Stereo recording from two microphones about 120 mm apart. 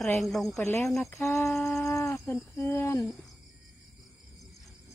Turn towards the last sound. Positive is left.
turn(degrees=25)  # may be behind; listen again after turning